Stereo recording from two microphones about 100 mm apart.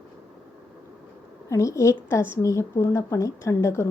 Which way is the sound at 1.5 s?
30° left (ahead or behind).